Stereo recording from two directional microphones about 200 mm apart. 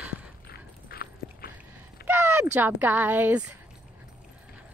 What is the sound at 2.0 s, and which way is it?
Speech, 10° right (ahead or behind).